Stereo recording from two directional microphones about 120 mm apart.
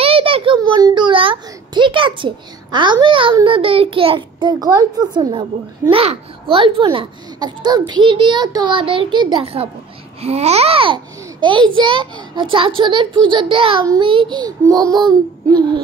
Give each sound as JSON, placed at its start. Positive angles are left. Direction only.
{"t": 0.0, "sound": "a sound", "side_deg": -50}
{"t": 0.6, "sound": "a sound", "side_deg": -35}
{"t": 3.4, "sound": "a child's voice", "side_deg": -50}
{"t": 5.9, "sound": "a child's voice", "side_deg": -50}
{"t": 9.4, "sound": "babbling", "side_deg": -55}
{"t": 11.4, "sound": "a child's voice", "side_deg": -40}
{"t": 13.8, "sound": "music", "side_deg": -40}